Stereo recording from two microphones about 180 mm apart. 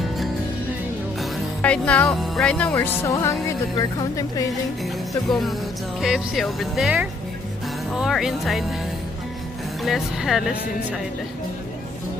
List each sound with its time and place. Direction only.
1.6 s music: 5° left (ahead or behind)
3.4 s speech: 20° left (ahead or behind)
5.3 s speech: centre (ahead or behind)
9.8 s speech: centre (ahead or behind)